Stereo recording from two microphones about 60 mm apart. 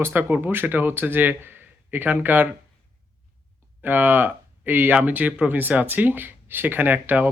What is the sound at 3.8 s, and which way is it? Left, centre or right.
Speech, right.